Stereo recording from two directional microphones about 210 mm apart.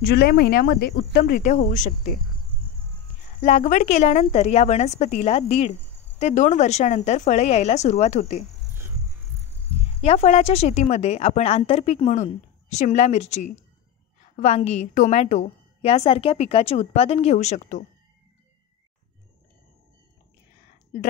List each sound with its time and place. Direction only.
0.0 s cricket: 50° left (ahead or behind)
3.4 s a woman's voice: 35° left (ahead or behind)
8.7 s music: 10° right (ahead or behind)
10.0 s a woman's voice: 30° left (ahead or behind)